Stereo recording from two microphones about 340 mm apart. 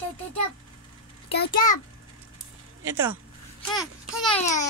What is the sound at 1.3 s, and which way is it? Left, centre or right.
Speech, left.